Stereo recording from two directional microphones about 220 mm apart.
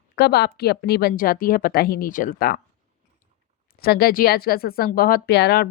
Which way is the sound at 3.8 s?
45° left (ahead or behind).